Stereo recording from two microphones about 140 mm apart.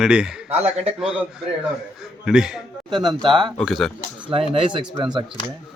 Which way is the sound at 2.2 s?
5° right (ahead or behind).